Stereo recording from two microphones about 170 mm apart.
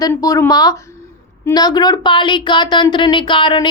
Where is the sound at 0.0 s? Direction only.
20° left (ahead or behind).